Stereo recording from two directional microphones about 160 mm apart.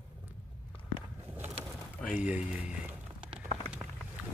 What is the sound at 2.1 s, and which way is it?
Speech, 10° right (ahead or behind).